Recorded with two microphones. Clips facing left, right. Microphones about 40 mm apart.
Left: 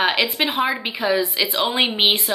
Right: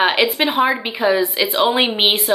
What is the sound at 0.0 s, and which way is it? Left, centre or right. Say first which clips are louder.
Speech: right 4 dB; centre.